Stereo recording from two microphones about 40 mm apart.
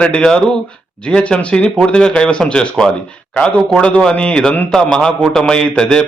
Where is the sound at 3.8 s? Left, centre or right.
Left.